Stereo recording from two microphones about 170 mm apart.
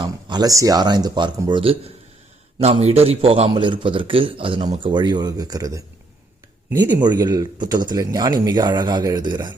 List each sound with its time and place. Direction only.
0.0 s a man's voice: 25° right (ahead or behind)
6.7 s speech: 10° right (ahead or behind)
7.0 s a man's voice: 25° right (ahead or behind)